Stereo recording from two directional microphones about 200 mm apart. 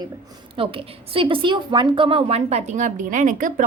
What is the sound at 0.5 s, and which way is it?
A woman's voice, 25° right (ahead or behind).